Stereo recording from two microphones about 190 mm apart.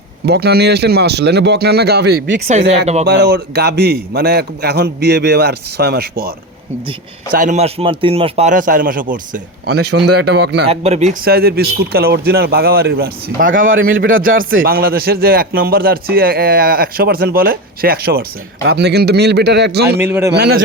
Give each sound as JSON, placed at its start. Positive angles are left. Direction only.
{"t": 0.3, "sound": "a man's voice", "side_deg": -60}
{"t": 2.5, "sound": "speech", "side_deg": -35}
{"t": 3.1, "sound": "a man's voice", "side_deg": -60}
{"t": 7.3, "sound": "a man's voice", "side_deg": -40}
{"t": 10.7, "sound": "a man's voice", "side_deg": -35}
{"t": 20.0, "sound": "a man's voice", "side_deg": -10}
{"t": 20.3, "sound": "a man's voice", "side_deg": -60}